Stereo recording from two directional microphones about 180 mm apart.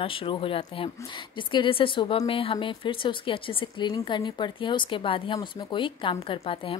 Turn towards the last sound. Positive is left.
turn(degrees=30)  # may be behind; listen again after turning